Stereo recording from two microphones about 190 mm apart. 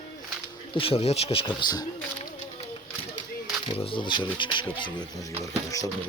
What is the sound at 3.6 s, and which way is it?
Speech, 30° left (ahead or behind).